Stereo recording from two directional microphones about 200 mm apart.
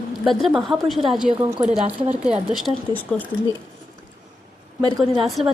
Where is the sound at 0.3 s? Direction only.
Centre (ahead or behind).